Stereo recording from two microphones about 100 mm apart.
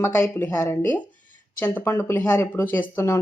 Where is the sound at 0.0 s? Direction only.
25° left (ahead or behind).